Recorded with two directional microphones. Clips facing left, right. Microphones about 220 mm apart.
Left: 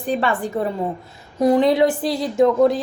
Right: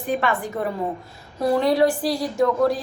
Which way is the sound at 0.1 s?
30° left (ahead or behind).